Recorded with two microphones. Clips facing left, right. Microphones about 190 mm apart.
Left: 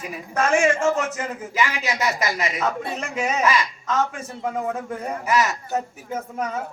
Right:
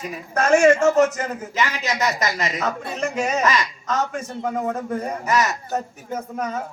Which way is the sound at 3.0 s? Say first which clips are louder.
Right 2 dB; 40° right (ahead or behind).